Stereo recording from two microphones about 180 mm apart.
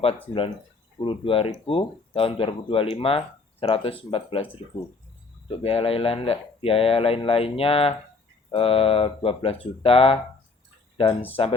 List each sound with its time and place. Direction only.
0.9 s speech: 30° left (ahead or behind)
5.5 s speech: 30° left (ahead or behind)